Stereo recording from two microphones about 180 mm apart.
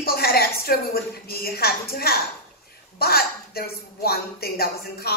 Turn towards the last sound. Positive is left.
turn(degrees=60)  # may be behind; listen again after turning